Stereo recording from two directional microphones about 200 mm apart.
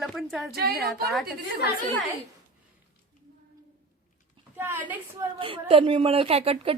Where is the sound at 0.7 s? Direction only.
Centre (ahead or behind).